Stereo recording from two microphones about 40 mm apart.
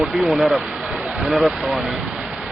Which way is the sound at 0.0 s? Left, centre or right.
Centre.